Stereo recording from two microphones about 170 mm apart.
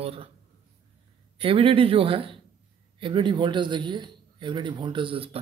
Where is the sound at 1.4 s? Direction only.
30° right (ahead or behind).